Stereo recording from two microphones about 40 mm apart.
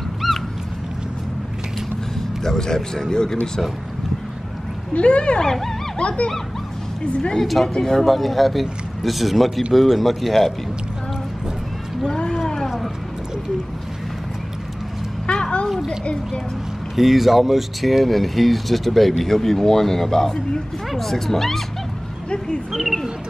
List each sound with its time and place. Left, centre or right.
0.2 s a sound: centre
2.4 s a man's voice: centre
4.9 s speech: left
5.4 s a man's voice: centre
5.9 s speech: left
7.4 s speech: centre
15.2 s a sound: left
15.7 s a child's voice: centre
22.7 s bird: centre